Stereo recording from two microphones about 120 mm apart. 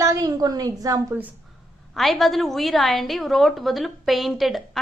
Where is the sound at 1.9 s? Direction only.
Centre (ahead or behind).